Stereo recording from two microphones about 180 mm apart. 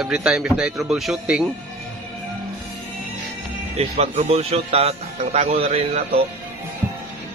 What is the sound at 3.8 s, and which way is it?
Speech, 35° right (ahead or behind).